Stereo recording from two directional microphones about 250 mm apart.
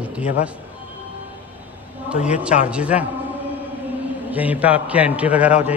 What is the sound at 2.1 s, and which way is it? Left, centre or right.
Speech, centre.